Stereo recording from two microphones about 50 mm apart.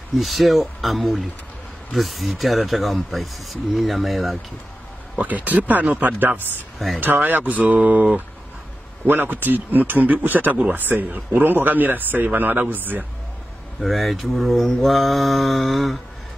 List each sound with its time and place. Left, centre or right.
0.2 s speech: centre
5.2 s speech: right
9.0 s speech: right
13.7 s speech: centre